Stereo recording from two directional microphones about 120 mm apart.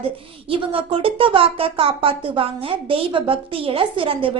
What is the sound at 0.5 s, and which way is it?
A woman's voice, 50° right (ahead or behind).